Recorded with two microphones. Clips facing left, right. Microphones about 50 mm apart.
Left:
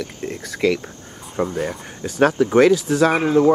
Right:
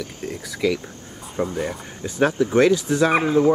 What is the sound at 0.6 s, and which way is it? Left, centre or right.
Speech, left.